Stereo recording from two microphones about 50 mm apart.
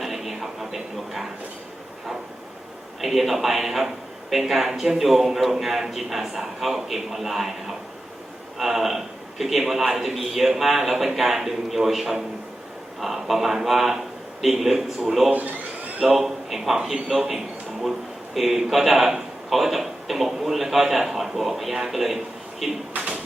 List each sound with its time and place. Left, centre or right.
0.0 s a sound: centre
3.0 s a man's voice: centre
8.5 s a man's voice: centre
15.3 s speech: right
16.0 s a man's voice: centre